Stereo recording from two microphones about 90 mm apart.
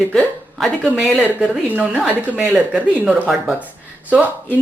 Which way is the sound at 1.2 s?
15° right (ahead or behind).